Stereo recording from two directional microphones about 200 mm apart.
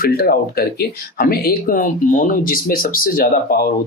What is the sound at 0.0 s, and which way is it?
Speech, 50° left (ahead or behind).